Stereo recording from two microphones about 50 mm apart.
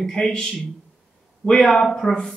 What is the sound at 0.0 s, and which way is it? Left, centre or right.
Speech, centre.